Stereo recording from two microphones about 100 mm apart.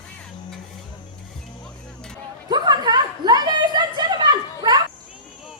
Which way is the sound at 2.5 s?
45° right (ahead or behind).